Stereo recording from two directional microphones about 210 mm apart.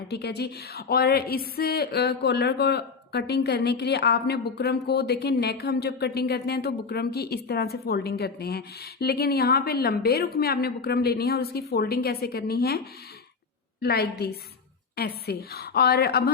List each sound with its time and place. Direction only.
0.1 s speech: 50° left (ahead or behind)